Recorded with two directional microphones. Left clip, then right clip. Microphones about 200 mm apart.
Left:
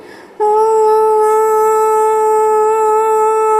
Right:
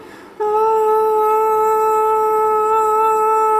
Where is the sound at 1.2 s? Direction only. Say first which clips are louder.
Left 4 dB; 15° left (ahead or behind).